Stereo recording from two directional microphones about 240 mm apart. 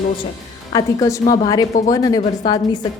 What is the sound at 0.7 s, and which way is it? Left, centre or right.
A woman's voice, centre.